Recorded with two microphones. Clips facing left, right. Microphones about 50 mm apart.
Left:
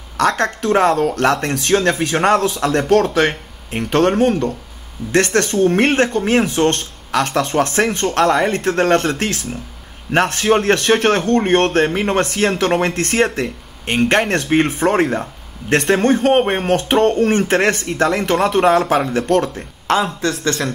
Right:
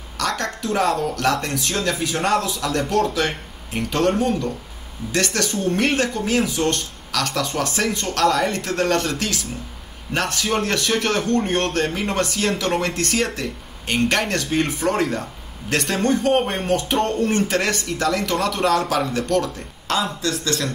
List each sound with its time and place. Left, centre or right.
0.2 s a sound: left
0.7 s a man's voice: left
2.9 s a man's voice: left
7.1 s a man's voice: left
11.7 s a man's voice: left